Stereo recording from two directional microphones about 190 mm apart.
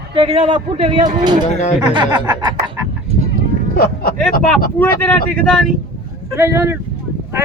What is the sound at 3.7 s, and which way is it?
Speech, 50° left (ahead or behind).